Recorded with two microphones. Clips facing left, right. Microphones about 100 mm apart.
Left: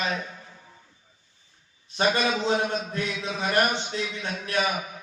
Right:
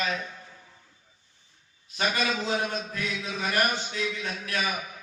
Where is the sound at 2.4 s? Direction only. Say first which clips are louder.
Left 4 dB; 25° left (ahead or behind).